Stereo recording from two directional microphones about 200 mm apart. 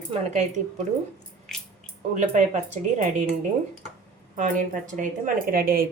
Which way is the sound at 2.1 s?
40° right (ahead or behind).